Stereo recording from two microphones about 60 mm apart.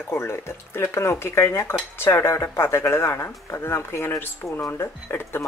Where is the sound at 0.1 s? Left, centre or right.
Left.